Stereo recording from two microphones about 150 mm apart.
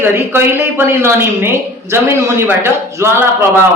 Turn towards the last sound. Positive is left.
turn(degrees=-15)  # may be behind; listen again after turning